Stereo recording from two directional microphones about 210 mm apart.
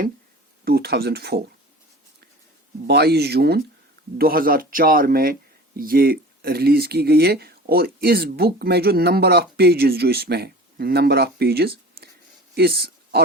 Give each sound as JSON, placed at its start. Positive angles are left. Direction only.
{"t": 0.6, "sound": "speech", "side_deg": -50}
{"t": 2.8, "sound": "speech", "side_deg": -50}